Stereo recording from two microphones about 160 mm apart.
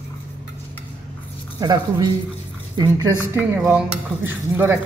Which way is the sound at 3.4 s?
10° right (ahead or behind).